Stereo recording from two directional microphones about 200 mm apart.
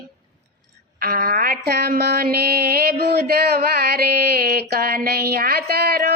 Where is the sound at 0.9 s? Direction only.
45° right (ahead or behind).